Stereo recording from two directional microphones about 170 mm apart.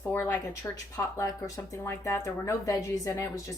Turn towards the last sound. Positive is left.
turn(degrees=20)  # may be behind; listen again after turning